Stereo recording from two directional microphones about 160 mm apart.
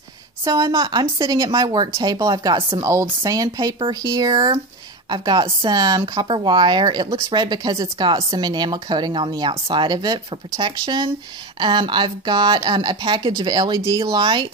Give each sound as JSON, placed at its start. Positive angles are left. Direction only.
{"t": 0.5, "sound": "speech", "side_deg": -20}